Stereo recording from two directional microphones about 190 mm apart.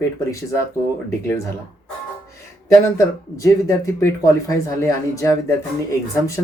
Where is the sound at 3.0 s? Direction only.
15° left (ahead or behind).